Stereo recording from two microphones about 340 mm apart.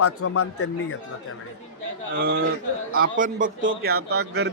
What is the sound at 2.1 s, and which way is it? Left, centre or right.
A man's voice, right.